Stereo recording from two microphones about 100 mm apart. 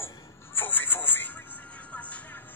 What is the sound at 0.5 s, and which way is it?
Music, 20° left (ahead or behind).